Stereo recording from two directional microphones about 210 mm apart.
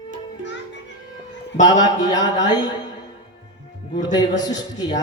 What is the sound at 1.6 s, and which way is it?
A man's voice, 20° left (ahead or behind).